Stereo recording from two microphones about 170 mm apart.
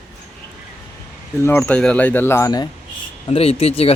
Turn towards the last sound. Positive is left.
turn(degrees=35)  # may be behind; listen again after turning